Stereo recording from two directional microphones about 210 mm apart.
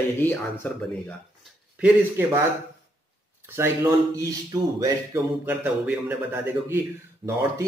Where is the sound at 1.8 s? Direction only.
10° right (ahead or behind).